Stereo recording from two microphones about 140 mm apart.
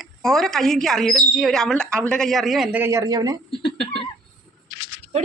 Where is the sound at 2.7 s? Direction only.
20° right (ahead or behind).